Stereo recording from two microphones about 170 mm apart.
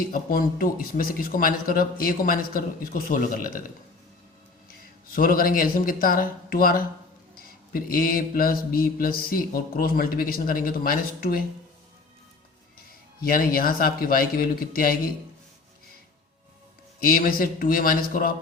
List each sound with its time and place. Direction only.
0.1 s mantra: 60° left (ahead or behind)
5.1 s mantra: 55° left (ahead or behind)
13.2 s mantra: 60° left (ahead or behind)
17.0 s mantra: 60° left (ahead or behind)